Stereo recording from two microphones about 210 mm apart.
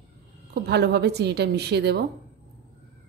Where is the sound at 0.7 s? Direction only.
55° right (ahead or behind).